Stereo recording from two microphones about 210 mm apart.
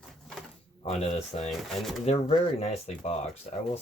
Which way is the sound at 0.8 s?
30° left (ahead or behind).